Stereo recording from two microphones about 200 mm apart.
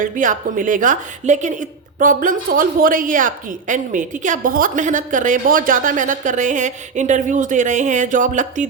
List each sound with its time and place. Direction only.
0.0 s a woman's voice: 40° right (ahead or behind)